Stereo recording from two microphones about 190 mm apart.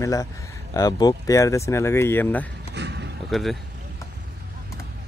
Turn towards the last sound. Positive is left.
turn(degrees=0)  # may be behind; listen again after turning